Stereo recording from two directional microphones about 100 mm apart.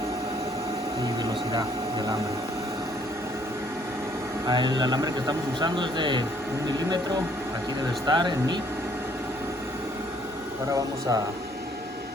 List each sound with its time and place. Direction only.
1.0 s a sound: 40° right (ahead or behind)
4.4 s a man's voice: 45° right (ahead or behind)
5.5 s a man's voice: 50° right (ahead or behind)
8.0 s a man's voice: 50° right (ahead or behind)
10.7 s speech: 35° right (ahead or behind)